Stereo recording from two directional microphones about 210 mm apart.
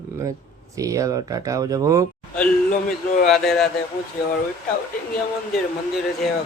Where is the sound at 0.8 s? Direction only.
15° right (ahead or behind).